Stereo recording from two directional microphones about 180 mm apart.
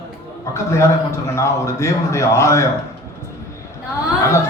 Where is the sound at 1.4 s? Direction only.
15° left (ahead or behind).